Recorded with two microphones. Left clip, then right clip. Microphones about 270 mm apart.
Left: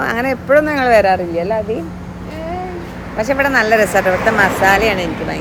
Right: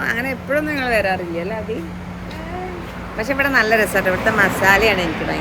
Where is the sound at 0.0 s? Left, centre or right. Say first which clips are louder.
Left 4 dB; left.